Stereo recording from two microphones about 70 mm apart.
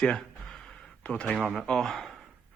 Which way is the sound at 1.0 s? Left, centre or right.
Centre.